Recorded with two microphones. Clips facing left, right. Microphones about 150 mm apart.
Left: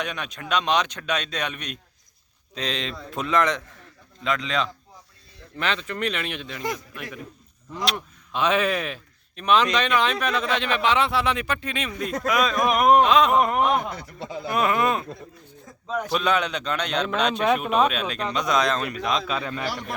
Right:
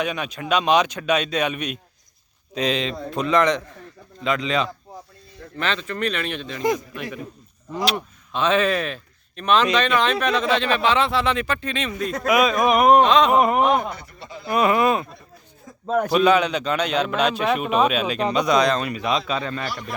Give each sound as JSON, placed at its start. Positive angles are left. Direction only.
{"t": 0.0, "sound": "a man's voice", "side_deg": -5}
{"t": 5.5, "sound": "speech", "side_deg": 15}
{"t": 6.6, "sound": "a man's voice", "side_deg": -10}
{"t": 7.8, "sound": "a man's voice", "side_deg": 0}
{"t": 8.3, "sound": "a man's voice", "side_deg": 15}
{"t": 10.6, "sound": "speech", "side_deg": 15}
{"t": 12.2, "sound": "a man's voice", "side_deg": -10}
{"t": 15.9, "sound": "a man's voice", "side_deg": -50}
{"t": 16.1, "sound": "a man's voice", "side_deg": 0}